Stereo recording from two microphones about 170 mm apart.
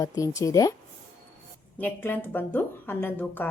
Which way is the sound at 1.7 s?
10° left (ahead or behind).